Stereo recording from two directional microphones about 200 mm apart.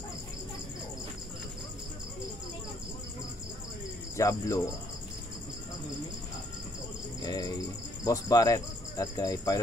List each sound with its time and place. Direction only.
4.2 s speech: 15° left (ahead or behind)
7.2 s speech: 20° left (ahead or behind)